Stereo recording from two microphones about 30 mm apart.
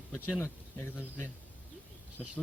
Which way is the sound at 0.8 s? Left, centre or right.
Left.